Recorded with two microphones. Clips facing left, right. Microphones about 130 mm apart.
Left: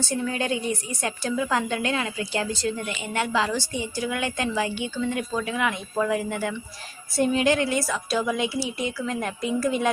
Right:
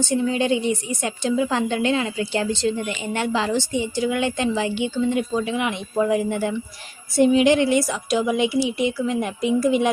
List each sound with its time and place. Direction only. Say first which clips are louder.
0.1 s a woman's voice: right 6 dB; 25° right (ahead or behind)